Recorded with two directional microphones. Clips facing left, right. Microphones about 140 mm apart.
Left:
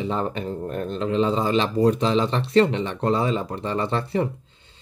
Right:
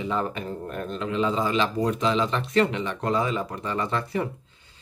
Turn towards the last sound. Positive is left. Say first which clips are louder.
# left 3 dB
turn(degrees=30)  # may be behind; listen again after turning